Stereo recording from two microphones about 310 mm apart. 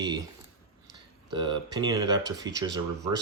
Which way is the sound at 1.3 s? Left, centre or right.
Centre.